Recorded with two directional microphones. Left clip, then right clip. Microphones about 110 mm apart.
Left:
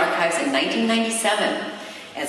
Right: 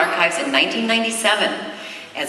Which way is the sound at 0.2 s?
15° right (ahead or behind).